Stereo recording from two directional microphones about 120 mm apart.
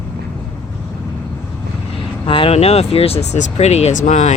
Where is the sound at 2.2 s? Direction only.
50° left (ahead or behind).